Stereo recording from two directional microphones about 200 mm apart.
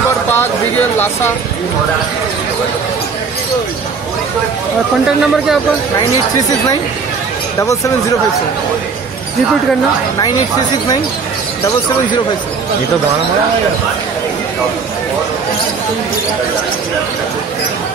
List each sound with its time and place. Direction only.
0.9 s speech: 10° left (ahead or behind)
5.0 s speech: centre (ahead or behind)
7.6 s speech: 15° left (ahead or behind)